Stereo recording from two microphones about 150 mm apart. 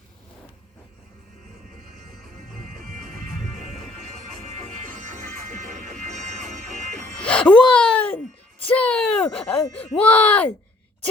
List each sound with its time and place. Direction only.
2.6 s music: 65° right (ahead or behind)
3.2 s music: centre (ahead or behind)
4.9 s music: 55° right (ahead or behind)
7.2 s a sound: 5° left (ahead or behind)
9.6 s speech: 10° left (ahead or behind)